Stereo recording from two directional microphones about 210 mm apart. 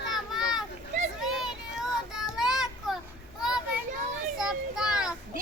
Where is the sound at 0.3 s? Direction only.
Centre (ahead or behind).